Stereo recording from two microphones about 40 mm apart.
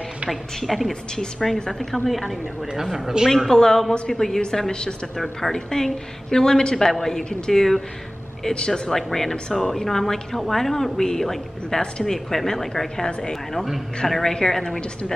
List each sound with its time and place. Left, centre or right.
0.6 s a woman's voice: centre
2.7 s speech: centre
3.5 s a woman's voice: centre
5.1 s a woman's voice: centre
7.2 s a woman's voice: left
7.5 s a woman's voice: centre
8.5 s a woman's voice: centre
8.9 s a woman's voice: centre